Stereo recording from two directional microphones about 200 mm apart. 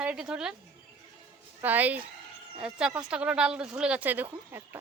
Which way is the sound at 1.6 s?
10° right (ahead or behind).